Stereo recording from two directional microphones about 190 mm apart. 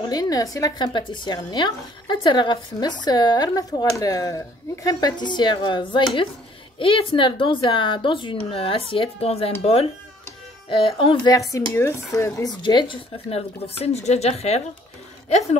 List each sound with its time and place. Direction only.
0.1 s speech: 20° left (ahead or behind)
11.5 s speech: 15° left (ahead or behind); by 14.6 s 35° left (ahead or behind)